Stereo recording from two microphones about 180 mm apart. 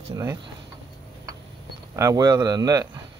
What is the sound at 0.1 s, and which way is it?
Speech, 15° right (ahead or behind).